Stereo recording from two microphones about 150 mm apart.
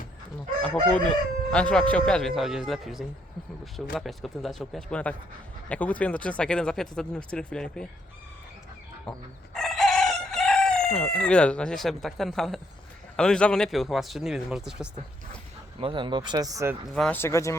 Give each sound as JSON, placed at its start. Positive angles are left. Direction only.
{"t": 0.9, "sound": "speech", "side_deg": 5}
{"t": 9.6, "sound": "crowing", "side_deg": 0}
{"t": 13.1, "sound": "speech", "side_deg": 5}
{"t": 15.8, "sound": "speech", "side_deg": -35}
{"t": 16.9, "sound": "speech", "side_deg": 0}
{"t": 17.2, "sound": "speech", "side_deg": 20}